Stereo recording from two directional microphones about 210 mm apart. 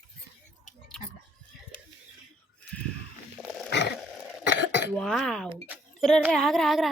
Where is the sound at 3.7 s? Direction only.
50° left (ahead or behind).